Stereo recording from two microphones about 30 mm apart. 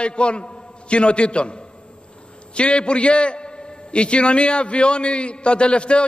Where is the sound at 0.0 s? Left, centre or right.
Left.